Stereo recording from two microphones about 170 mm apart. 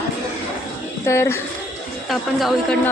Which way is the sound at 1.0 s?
15° left (ahead or behind).